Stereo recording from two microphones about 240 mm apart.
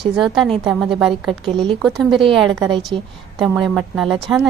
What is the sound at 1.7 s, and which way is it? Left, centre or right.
A woman's voice, centre.